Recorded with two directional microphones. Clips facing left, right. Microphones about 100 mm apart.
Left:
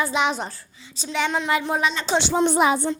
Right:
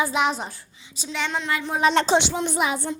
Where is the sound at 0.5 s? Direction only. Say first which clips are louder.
Left 1 dB; 10° right (ahead or behind).